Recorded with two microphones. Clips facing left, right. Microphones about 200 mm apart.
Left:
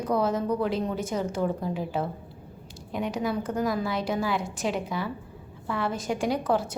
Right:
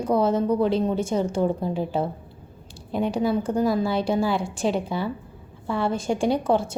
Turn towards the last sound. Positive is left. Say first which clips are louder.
# right 4 dB
turn(degrees=-25)  # may be behind; listen again after turning